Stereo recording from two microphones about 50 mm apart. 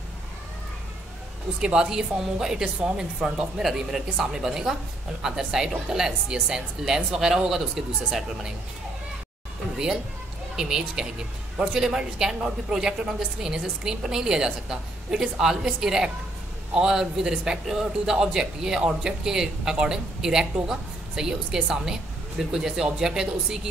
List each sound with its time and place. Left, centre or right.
1.6 s a man's voice: centre
10.5 s a man's voice: centre